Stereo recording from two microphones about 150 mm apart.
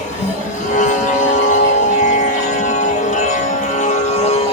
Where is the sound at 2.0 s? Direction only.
55° left (ahead or behind).